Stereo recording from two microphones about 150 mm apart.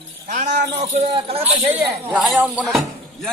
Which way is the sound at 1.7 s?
5° right (ahead or behind).